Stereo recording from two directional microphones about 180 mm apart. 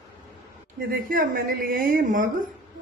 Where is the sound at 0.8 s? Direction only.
55° right (ahead or behind).